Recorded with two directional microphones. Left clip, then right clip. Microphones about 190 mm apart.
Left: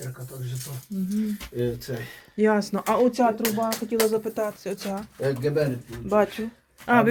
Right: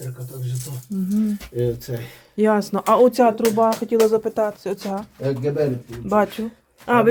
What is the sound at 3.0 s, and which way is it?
Speech, 40° right (ahead or behind).